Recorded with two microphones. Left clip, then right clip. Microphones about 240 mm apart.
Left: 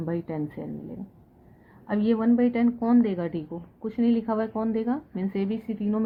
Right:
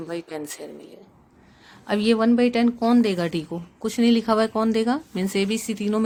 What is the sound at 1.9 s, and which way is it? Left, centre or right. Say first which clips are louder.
A woman's voice: right 4 dB; right.